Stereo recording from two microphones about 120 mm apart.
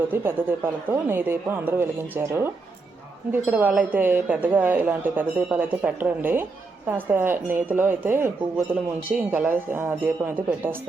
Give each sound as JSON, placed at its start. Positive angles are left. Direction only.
{"t": 0.1, "sound": "speech", "side_deg": -20}